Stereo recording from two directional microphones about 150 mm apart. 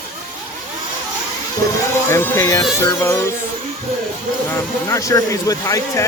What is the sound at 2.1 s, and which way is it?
Speech, 15° left (ahead or behind).